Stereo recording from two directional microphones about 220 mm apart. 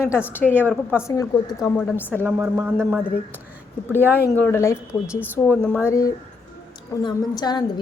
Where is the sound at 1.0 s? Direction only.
15° left (ahead or behind).